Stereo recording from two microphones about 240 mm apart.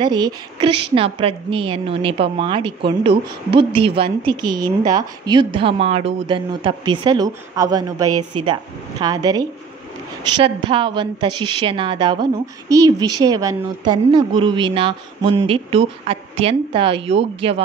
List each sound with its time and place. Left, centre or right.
0.0 s a woman's voice: centre
8.1 s a woman's voice: right
9.0 s a woman's voice: centre